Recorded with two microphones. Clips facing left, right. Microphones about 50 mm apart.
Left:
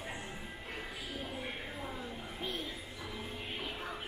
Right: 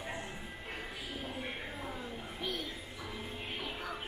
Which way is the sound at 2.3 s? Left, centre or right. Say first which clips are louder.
Right 1 dB; left.